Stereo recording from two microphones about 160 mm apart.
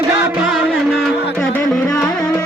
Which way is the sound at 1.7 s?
5° left (ahead or behind).